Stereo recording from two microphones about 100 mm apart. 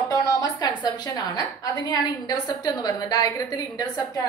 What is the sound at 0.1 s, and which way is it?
A woman's voice, 40° left (ahead or behind).